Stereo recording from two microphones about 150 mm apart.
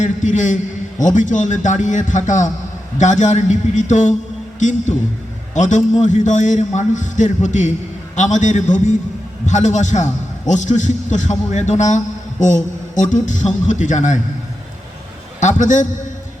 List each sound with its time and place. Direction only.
0.0 s a man's voice: 55° left (ahead or behind)
5.5 s a man's voice: 55° left (ahead or behind)
15.4 s a man's voice: 55° left (ahead or behind)